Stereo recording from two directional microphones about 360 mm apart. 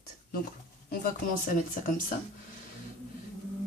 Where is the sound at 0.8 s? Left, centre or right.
Left.